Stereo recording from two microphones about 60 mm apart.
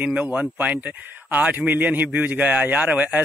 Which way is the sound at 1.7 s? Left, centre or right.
Right.